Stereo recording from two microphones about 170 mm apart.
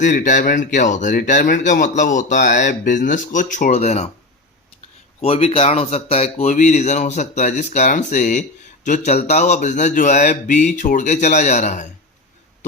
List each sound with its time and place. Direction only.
0.0 s speech: 45° left (ahead or behind)
5.2 s speech: 35° left (ahead or behind)